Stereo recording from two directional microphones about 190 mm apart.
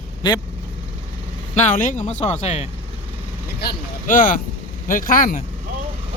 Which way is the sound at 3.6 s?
50° left (ahead or behind).